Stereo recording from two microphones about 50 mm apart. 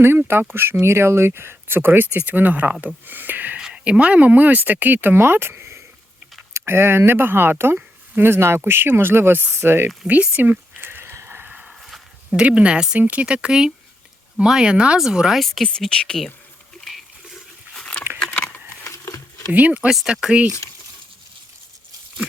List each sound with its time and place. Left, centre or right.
0.0 s speech: right
3.6 s speech: right
8.2 s speech: right
10.1 s speech: right
10.8 s a sound: right
11.7 s a sound: centre
12.4 s speech: right
15.4 s speech: centre
15.6 s speech: centre
16.8 s a sound: centre
18.3 s a sound: left
18.9 s crumpling: left
19.5 s speech: right
19.9 s speech: centre